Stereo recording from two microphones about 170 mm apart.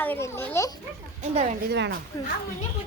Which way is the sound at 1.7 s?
75° right (ahead or behind).